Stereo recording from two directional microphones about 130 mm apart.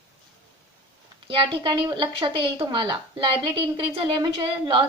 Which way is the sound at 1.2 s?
40° right (ahead or behind).